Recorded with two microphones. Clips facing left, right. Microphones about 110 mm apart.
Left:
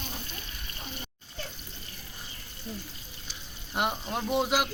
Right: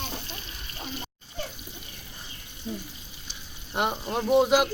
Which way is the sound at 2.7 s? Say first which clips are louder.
Right 5 dB; 10° right (ahead or behind).